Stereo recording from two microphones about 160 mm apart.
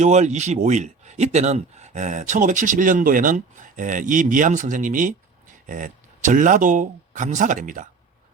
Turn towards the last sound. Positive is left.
turn(degrees=-55)  # may be behind; listen again after turning